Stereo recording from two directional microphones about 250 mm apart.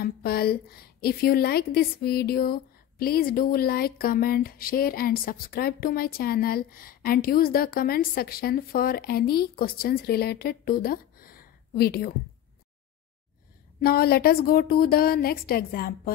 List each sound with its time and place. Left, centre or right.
0.0 s a woman's voice: left
13.8 s a woman's voice: left